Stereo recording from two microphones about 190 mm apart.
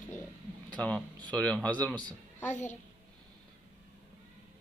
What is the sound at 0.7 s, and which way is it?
A man's voice, 5° left (ahead or behind).